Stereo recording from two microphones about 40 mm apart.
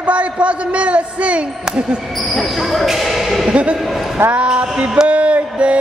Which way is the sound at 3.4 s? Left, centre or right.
Right.